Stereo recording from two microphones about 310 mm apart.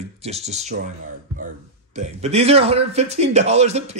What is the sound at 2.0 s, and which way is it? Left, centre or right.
Speech, right.